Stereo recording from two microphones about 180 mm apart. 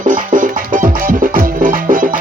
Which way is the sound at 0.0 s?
45° right (ahead or behind).